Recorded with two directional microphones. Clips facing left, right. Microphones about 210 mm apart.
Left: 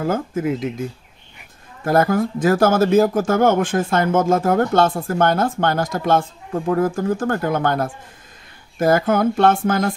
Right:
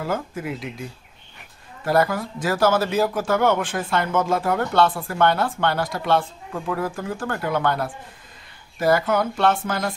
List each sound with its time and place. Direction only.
0.0 s speech: 45° left (ahead or behind)
1.9 s speech: 50° left (ahead or behind)